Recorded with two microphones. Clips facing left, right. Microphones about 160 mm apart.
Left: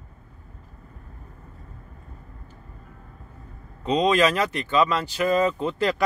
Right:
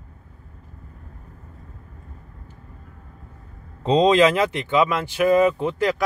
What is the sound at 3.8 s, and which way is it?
Speech, 30° right (ahead or behind).